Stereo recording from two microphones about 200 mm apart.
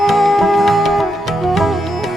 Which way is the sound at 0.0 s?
Centre (ahead or behind).